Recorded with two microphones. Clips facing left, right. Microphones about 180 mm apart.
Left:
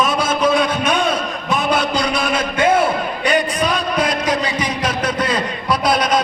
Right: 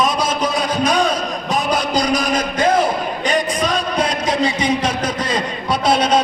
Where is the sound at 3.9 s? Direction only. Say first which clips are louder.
Right 1 dB; 30° right (ahead or behind).